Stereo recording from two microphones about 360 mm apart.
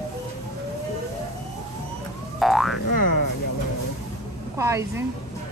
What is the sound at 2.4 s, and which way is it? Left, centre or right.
Boing, centre.